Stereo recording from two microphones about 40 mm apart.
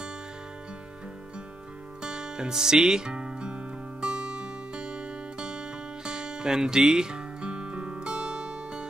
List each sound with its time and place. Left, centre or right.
2.0 s music: centre